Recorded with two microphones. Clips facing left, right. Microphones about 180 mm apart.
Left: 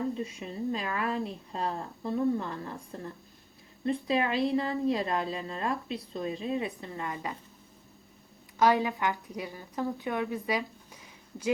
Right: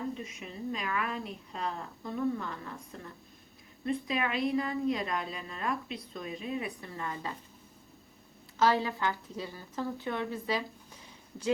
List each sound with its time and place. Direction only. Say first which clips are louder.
0.1 s a woman's voice: left 5 dB; 30° left (ahead or behind); by 7.3 s 15° left (ahead or behind)
8.5 s a woman's voice: left 3 dB; 15° left (ahead or behind)